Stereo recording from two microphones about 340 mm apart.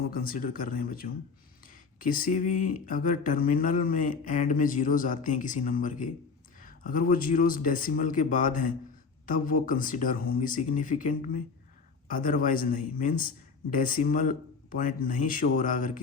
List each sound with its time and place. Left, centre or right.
0.1 s speech: left